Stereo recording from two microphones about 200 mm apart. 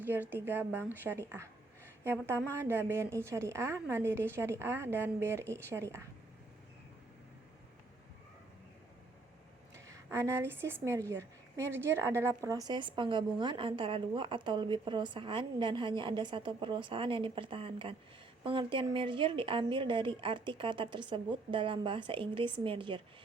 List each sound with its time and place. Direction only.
0.0 s a woman's voice: 10° right (ahead or behind)
9.7 s a woman's voice: 15° right (ahead or behind)